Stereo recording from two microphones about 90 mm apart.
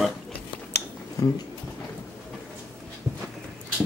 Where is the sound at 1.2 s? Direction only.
35° left (ahead or behind).